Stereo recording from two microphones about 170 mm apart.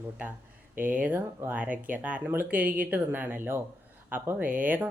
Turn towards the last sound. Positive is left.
turn(degrees=-10)  # may be behind; listen again after turning